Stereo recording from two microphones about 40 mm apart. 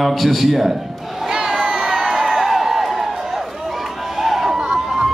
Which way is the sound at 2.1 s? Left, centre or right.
Centre.